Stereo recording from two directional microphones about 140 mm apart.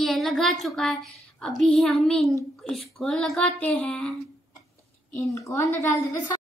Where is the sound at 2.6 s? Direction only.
5° left (ahead or behind).